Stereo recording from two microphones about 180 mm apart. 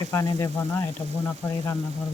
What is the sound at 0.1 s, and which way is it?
Speech, 15° left (ahead or behind).